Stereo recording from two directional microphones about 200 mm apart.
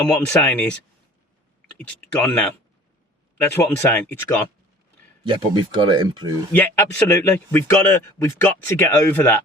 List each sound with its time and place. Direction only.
0.1 s a man's voice: 5° left (ahead or behind)
2.1 s speech: 5° left (ahead or behind)
3.4 s a man's voice: 10° left (ahead or behind)
5.3 s speech: 20° right (ahead or behind)
6.5 s a man's voice: 10° left (ahead or behind)